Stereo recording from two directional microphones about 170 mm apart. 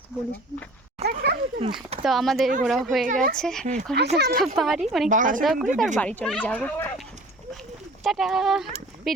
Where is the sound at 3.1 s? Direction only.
50° right (ahead or behind).